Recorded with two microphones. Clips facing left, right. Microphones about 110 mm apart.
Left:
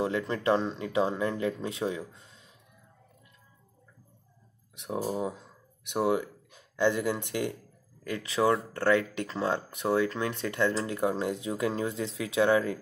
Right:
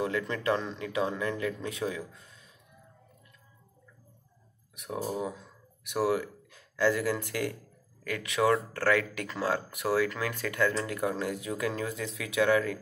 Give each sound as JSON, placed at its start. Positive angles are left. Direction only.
{"t": 0.0, "sound": "speech", "side_deg": 30}
{"t": 4.7, "sound": "speech", "side_deg": 25}